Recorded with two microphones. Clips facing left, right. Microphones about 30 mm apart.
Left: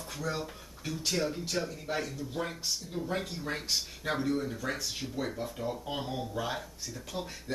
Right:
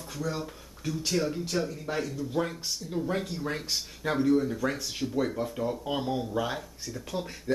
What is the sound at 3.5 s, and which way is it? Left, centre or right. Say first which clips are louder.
Speech: right 1 dB; centre.